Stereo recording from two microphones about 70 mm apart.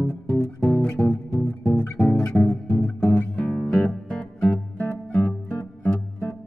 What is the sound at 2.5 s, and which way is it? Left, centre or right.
Music, left.